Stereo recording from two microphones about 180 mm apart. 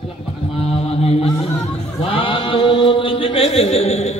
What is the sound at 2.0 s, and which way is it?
Chant, 30° left (ahead or behind).